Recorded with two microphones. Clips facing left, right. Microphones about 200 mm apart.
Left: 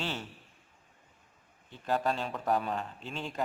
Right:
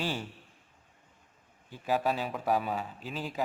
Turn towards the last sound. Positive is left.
turn(degrees=-5)  # may be behind; listen again after turning